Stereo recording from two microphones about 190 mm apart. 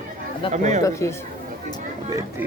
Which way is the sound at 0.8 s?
15° left (ahead or behind).